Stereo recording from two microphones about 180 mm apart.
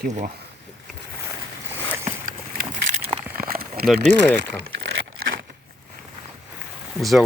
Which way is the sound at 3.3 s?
55° right (ahead or behind).